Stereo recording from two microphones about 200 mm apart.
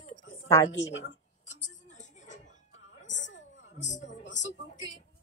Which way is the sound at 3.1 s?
65° left (ahead or behind).